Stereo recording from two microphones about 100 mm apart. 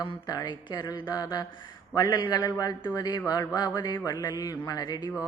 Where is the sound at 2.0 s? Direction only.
50° left (ahead or behind).